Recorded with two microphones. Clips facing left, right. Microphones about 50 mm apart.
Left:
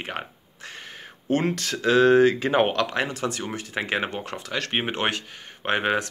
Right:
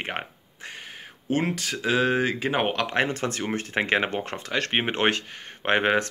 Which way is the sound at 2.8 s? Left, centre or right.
Right.